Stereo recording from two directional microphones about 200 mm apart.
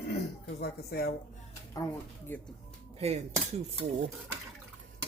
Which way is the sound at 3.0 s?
30° right (ahead or behind).